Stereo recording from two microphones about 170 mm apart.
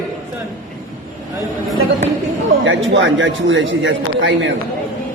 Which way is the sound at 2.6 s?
90° right.